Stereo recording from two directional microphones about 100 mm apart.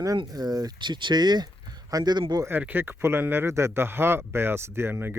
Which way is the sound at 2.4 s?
20° right (ahead or behind).